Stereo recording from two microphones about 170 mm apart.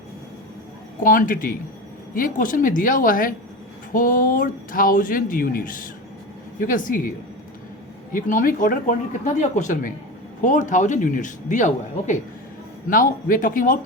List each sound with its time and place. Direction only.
1.0 s speech: 55° left (ahead or behind)
8.1 s speech: 55° left (ahead or behind)